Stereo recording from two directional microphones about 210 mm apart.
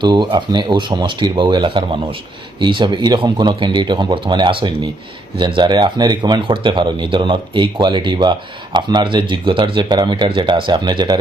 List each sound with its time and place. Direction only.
0.0 s speech: 20° right (ahead or behind)